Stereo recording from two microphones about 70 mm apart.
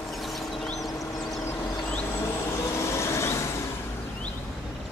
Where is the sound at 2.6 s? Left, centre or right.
Left.